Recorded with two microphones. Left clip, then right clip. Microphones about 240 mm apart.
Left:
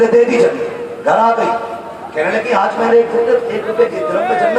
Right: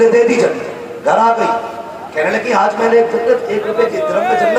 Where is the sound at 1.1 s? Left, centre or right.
Right.